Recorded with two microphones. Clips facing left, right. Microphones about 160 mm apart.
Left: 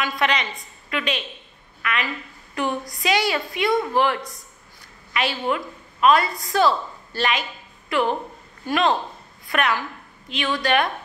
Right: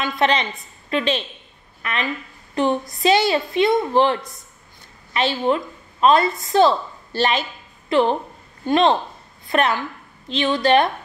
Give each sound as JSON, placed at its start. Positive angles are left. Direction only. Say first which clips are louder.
{"t": 0.0, "sound": "a woman's voice", "louder": "right 4 dB", "side_deg": -25}